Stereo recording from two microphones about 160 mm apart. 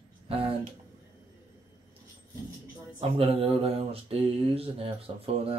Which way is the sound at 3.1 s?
35° right (ahead or behind).